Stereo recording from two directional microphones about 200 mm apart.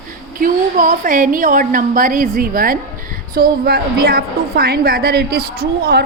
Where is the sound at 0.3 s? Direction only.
45° right (ahead or behind).